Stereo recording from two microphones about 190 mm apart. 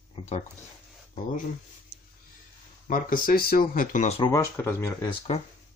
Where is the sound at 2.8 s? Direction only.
45° left (ahead or behind).